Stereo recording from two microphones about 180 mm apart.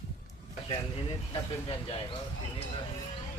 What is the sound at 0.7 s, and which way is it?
Speech, 30° left (ahead or behind).